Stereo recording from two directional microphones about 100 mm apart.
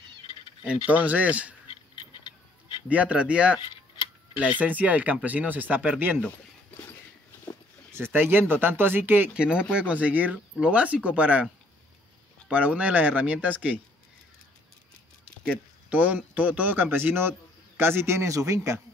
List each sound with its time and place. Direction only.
0.8 s speech: 15° right (ahead or behind)
2.9 s speech: 15° right (ahead or behind)
4.6 s speech: 15° right (ahead or behind)
7.9 s speech: 20° right (ahead or behind)
15.9 s a man's voice: 15° right (ahead or behind); by 18.8 s 30° right (ahead or behind)